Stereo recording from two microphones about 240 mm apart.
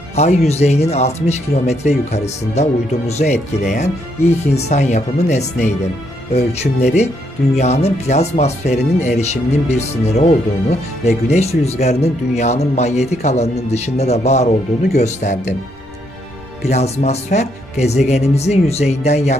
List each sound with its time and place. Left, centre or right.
0.1 s speech: left
16.6 s speech: left